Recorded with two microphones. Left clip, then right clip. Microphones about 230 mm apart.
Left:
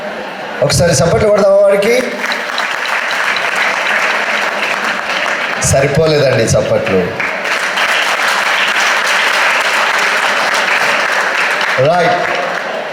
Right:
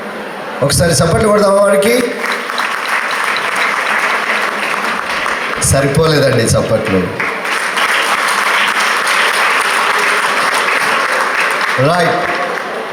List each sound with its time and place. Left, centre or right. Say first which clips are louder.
0.8 s a man's voice: left 2 dB; right
5.7 s a man's voice: left 1 dB; right